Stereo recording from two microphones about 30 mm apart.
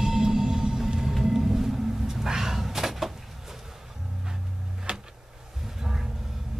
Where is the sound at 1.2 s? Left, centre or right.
Centre.